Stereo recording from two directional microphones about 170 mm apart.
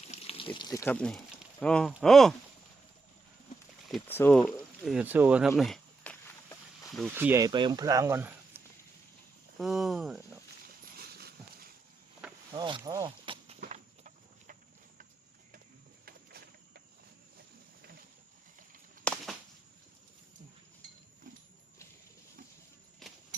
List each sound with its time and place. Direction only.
0.1 s water: 35° left (ahead or behind); by 0.9 s 20° left (ahead or behind)
0.9 s speech: 5° left (ahead or behind)
4.1 s speech: 10° left (ahead or behind)
4.9 s speech: 10° right (ahead or behind); by 6.3 s 10° left (ahead or behind)
7.2 s speech: 15° right (ahead or behind)
9.6 s speech: centre (ahead or behind)
10.9 s horse: 70° right (ahead or behind)
12.5 s speech: 25° right (ahead or behind)
13.1 s horse: 30° right (ahead or behind)
13.7 s a sound: 45° right (ahead or behind)
16.0 s a sound: 65° right (ahead or behind)
19.0 s a sound: centre (ahead or behind)
23.0 s a sound: centre (ahead or behind)